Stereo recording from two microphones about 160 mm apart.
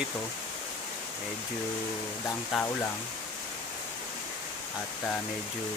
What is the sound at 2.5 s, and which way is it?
Speech, centre (ahead or behind).